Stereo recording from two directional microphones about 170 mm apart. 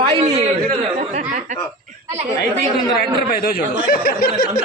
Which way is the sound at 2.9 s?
60° left (ahead or behind).